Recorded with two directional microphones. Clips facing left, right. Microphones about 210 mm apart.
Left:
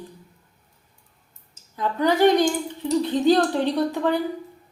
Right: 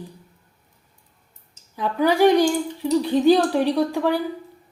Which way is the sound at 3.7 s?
10° right (ahead or behind).